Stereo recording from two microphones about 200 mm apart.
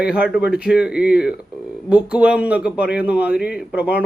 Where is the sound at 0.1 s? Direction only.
5° right (ahead or behind).